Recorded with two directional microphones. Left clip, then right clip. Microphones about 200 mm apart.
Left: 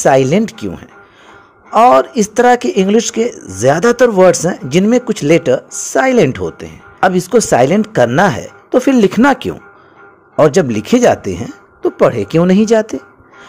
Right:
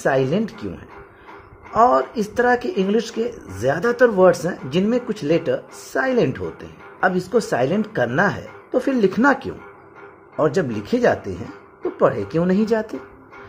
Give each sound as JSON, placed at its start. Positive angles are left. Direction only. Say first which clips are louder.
{"t": 0.0, "sound": "speech", "louder": "left 9 dB", "side_deg": 35}